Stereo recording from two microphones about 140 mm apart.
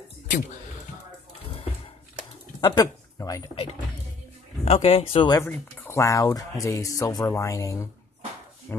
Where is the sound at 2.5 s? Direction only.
25° left (ahead or behind).